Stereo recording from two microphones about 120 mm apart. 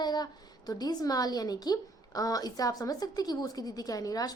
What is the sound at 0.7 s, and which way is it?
A woman's voice, 35° left (ahead or behind).